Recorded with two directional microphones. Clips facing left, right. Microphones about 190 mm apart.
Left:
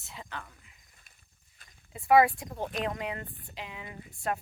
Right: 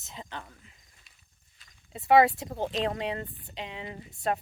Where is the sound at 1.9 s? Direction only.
25° right (ahead or behind).